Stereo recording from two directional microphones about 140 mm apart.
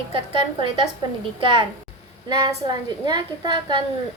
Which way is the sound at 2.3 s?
30° right (ahead or behind).